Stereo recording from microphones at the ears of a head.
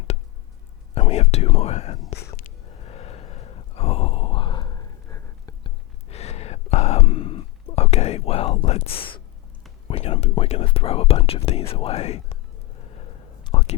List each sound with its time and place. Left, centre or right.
0.9 s whispering: left
5.6 s a sound: left
9.8 s whispering: left